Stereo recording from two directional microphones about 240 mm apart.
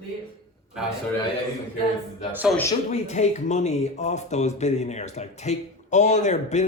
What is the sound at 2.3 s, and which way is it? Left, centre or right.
Speech, centre.